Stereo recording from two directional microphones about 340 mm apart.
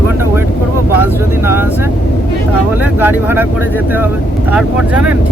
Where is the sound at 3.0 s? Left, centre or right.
Centre.